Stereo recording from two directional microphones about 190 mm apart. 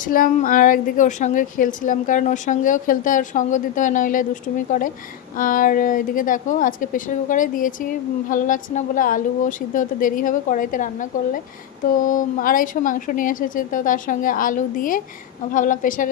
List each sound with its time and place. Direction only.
0.1 s a woman's voice: 45° left (ahead or behind)
11.9 s a woman's voice: 45° left (ahead or behind)